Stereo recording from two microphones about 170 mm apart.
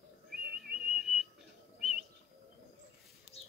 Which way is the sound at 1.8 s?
5° right (ahead or behind).